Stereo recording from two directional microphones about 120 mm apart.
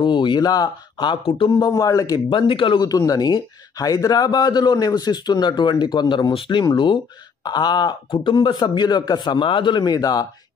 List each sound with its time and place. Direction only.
0.0 s speech: 40° left (ahead or behind)
1.5 s speech: 30° left (ahead or behind)